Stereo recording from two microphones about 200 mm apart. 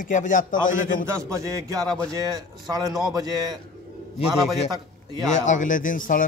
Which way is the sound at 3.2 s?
20° right (ahead or behind).